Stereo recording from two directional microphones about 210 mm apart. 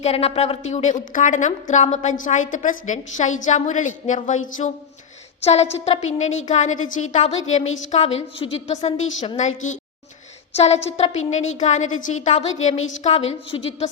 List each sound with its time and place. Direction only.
0.0 s a woman's voice: 30° left (ahead or behind)